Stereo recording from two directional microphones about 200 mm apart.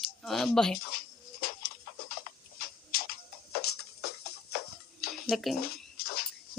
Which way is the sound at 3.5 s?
50° left (ahead or behind).